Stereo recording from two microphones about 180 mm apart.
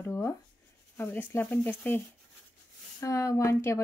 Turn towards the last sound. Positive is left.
turn(degrees=15)  # may be behind; listen again after turning